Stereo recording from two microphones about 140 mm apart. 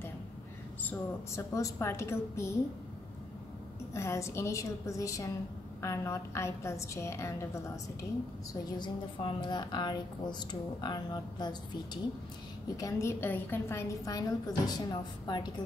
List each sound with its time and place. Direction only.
0.8 s a woman's voice: 20° left (ahead or behind)
3.9 s a woman's voice: 20° left (ahead or behind)
8.7 s a woman's voice: 35° left (ahead or behind)